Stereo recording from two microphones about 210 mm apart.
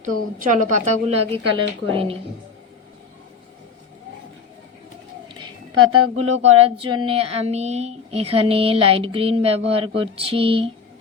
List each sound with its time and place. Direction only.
0.0 s a woman's voice: 35° right (ahead or behind)
5.9 s speech: 90° right
6.2 s a woman's voice: 30° right (ahead or behind)